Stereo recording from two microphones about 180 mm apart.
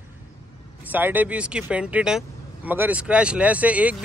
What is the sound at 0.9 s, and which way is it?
Speech, 10° right (ahead or behind).